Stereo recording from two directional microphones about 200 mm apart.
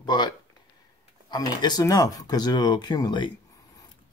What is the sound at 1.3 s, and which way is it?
Speech, 20° left (ahead or behind).